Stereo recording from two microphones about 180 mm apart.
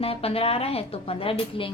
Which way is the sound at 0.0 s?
30° left (ahead or behind).